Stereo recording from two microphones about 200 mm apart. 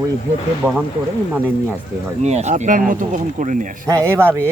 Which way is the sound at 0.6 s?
Centre (ahead or behind).